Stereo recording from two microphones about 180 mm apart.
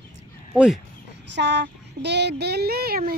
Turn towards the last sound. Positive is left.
turn(degrees=-55)  # may be behind; listen again after turning